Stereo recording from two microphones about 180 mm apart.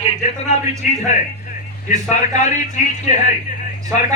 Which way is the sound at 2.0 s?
40° left (ahead or behind).